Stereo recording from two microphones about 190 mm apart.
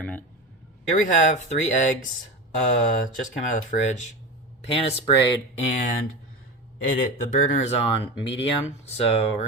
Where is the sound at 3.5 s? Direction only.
40° left (ahead or behind).